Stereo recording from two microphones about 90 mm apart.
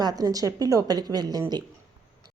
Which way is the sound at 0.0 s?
45° right (ahead or behind).